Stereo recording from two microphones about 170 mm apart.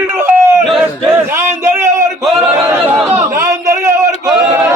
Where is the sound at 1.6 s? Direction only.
15° right (ahead or behind).